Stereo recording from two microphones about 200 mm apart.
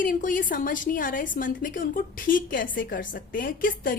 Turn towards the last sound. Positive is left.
turn(degrees=45)  # may be behind; listen again after turning